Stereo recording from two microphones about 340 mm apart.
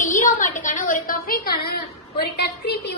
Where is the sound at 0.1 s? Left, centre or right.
Left.